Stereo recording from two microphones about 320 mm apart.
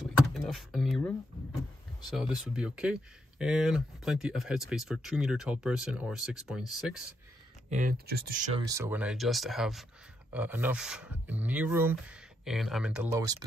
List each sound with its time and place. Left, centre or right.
0.3 s speech: centre
7.7 s speech: right
8.6 s speech: centre